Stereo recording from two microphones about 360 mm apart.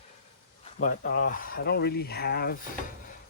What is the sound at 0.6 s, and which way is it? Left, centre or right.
Speech, left.